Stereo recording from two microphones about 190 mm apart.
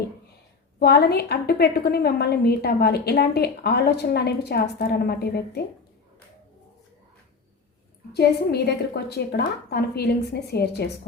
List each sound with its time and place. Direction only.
0.8 s a woman's voice: 55° left (ahead or behind)
8.1 s a woman's voice: 60° left (ahead or behind)